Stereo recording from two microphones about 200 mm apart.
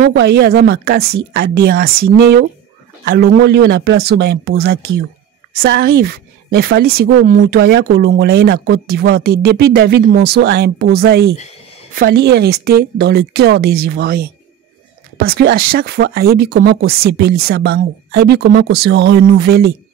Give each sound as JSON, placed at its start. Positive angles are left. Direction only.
{"t": 0.1, "sound": "speech", "side_deg": -55}
{"t": 7.4, "sound": "speech", "side_deg": -60}